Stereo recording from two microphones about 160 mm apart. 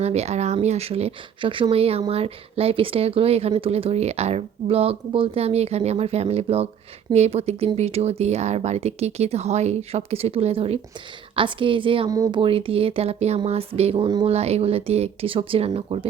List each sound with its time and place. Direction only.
0.0 s speech: 45° right (ahead or behind)
12.1 s speech: 20° right (ahead or behind)
12.4 s speech: 35° right (ahead or behind)
14.3 s speech: 40° right (ahead or behind)